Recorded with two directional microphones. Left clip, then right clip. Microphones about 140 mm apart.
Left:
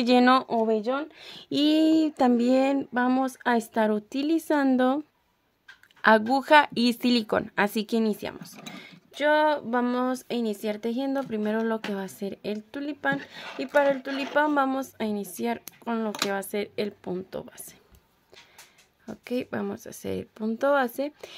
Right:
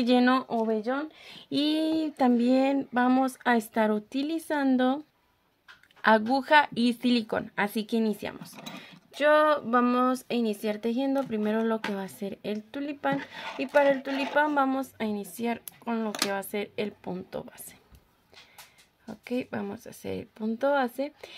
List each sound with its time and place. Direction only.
0.0 s speech: 35° left (ahead or behind)
0.3 s speech: 60° left (ahead or behind); by 2.9 s 30° left (ahead or behind)
2.9 s speech: 20° left (ahead or behind); by 5.0 s 40° left (ahead or behind)
6.0 s speech: 35° left (ahead or behind)
19.0 s speech: 35° left (ahead or behind)